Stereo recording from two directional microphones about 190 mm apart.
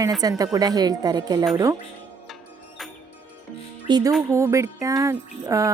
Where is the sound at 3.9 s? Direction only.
20° right (ahead or behind).